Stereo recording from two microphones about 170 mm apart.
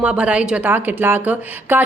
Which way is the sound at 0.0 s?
5° right (ahead or behind).